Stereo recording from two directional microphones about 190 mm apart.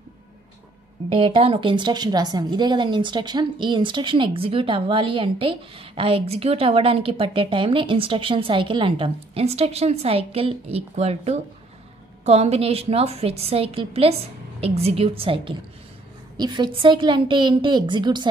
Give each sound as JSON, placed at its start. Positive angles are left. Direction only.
{"t": 1.0, "sound": "a woman's voice", "side_deg": -30}